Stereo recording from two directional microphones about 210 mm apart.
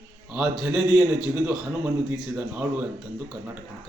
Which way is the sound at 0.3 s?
5° right (ahead or behind).